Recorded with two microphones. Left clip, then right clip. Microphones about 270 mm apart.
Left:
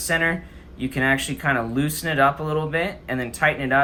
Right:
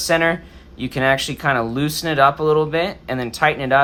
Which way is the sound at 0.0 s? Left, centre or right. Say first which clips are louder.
Right 5 dB; centre.